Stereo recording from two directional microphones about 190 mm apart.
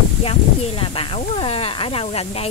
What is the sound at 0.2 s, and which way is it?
Speech, 30° left (ahead or behind).